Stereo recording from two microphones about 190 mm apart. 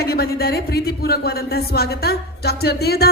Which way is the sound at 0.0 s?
55° left (ahead or behind).